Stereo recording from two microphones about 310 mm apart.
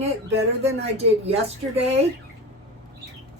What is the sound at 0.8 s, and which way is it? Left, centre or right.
Speech, centre.